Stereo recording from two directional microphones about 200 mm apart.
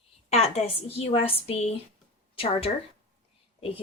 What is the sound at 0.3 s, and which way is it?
A woman's voice, 30° left (ahead or behind).